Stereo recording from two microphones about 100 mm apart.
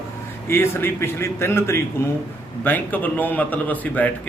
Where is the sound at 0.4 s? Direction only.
25° left (ahead or behind).